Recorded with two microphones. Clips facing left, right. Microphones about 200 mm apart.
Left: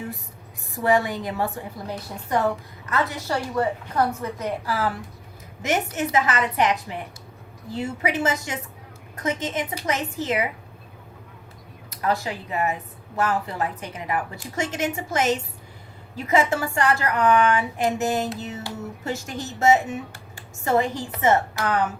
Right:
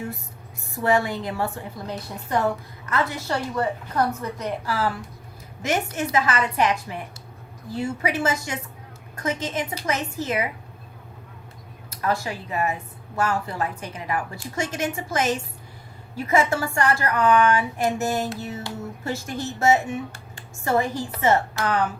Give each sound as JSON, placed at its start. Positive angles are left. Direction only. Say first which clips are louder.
{"t": 0.8, "sound": "a woman's voice", "louder": "even", "side_deg": 15}
{"t": 11.9, "sound": "a woman's voice", "louder": "left 1 dB", "side_deg": 15}